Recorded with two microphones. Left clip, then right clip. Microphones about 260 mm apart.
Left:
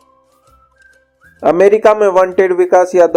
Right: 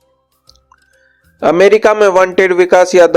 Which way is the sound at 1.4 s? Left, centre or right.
Right.